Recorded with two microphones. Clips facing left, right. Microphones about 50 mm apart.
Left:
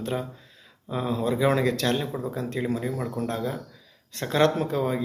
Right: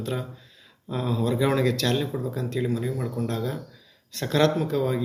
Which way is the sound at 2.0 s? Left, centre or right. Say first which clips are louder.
Right 1 dB; centre.